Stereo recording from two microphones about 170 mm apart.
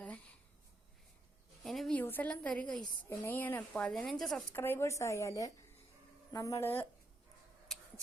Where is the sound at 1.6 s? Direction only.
Centre (ahead or behind).